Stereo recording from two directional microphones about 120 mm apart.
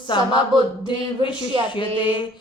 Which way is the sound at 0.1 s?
45° left (ahead or behind).